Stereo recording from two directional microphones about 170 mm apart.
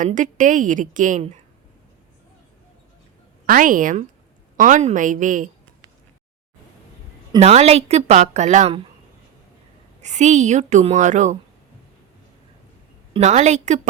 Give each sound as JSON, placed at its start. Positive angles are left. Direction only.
{"t": 0.0, "sound": "a woman's voice", "side_deg": -50}
{"t": 3.4, "sound": "a woman's voice", "side_deg": -55}
{"t": 7.3, "sound": "a woman's voice", "side_deg": -40}
{"t": 10.0, "sound": "a woman's voice", "side_deg": -45}
{"t": 13.1, "sound": "a woman's voice", "side_deg": -40}